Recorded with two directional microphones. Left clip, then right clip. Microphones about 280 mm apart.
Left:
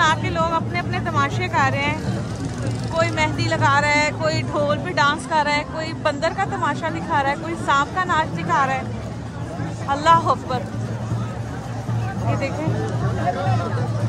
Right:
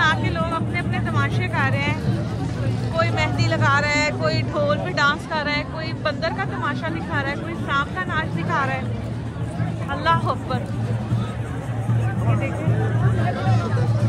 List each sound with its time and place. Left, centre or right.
0.0 s vehicle: centre
3.0 s speech: centre
9.8 s speech: centre